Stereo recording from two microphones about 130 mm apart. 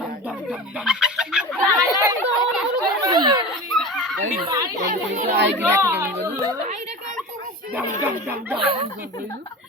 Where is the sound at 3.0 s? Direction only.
30° right (ahead or behind).